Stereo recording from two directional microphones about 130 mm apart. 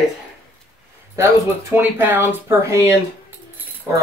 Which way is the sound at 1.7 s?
15° right (ahead or behind).